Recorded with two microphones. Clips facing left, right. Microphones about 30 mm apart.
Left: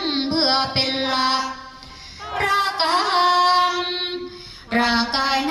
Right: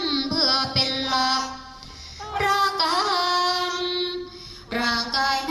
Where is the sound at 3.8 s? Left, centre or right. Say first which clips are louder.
Left 1 dB; left.